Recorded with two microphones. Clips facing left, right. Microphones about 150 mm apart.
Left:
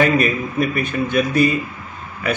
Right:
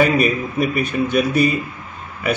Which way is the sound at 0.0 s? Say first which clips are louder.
Even; 5° right (ahead or behind).